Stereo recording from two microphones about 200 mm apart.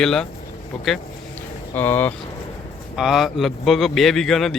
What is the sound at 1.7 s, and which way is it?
Speech, 10° left (ahead or behind).